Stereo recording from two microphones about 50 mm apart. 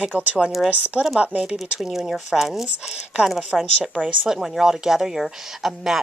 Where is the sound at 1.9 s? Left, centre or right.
Centre.